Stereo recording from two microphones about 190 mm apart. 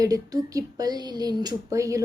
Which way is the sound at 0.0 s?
20° right (ahead or behind).